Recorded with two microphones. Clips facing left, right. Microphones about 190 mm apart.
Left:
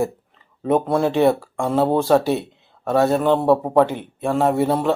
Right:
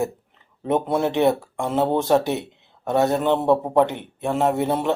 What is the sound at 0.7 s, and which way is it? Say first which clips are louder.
Speech: left 3 dB; 20° right (ahead or behind).